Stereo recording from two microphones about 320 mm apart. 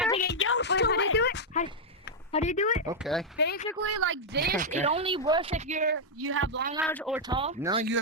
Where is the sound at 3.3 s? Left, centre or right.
Left.